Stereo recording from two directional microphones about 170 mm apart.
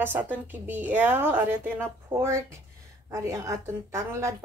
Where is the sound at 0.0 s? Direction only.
10° right (ahead or behind).